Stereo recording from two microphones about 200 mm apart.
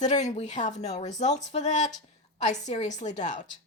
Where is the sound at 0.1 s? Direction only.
35° left (ahead or behind).